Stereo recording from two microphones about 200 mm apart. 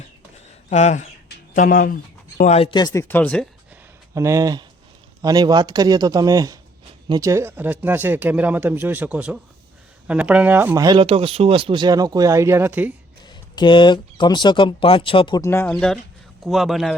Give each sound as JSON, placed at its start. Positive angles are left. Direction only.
{"t": 0.7, "sound": "speech", "side_deg": 35}
{"t": 1.5, "sound": "speech", "side_deg": 45}
{"t": 2.4, "sound": "speech", "side_deg": 30}
{"t": 4.1, "sound": "speech", "side_deg": -15}
{"t": 13.2, "sound": "speech", "side_deg": 20}
{"t": 15.4, "sound": "a man's voice", "side_deg": 10}